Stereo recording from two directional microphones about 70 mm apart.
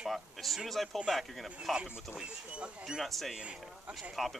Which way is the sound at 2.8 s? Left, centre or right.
Centre.